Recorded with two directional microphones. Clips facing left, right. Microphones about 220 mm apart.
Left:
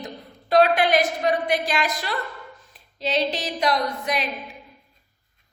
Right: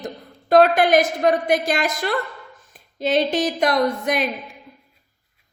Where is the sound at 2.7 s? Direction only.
50° right (ahead or behind).